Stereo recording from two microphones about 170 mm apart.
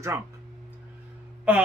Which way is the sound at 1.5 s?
10° right (ahead or behind).